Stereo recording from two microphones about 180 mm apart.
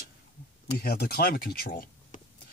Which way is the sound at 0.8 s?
60° left (ahead or behind).